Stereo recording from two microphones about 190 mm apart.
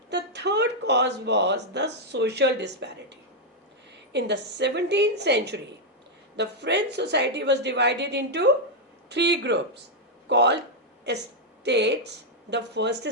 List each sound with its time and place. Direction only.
0.1 s speech: 65° right (ahead or behind)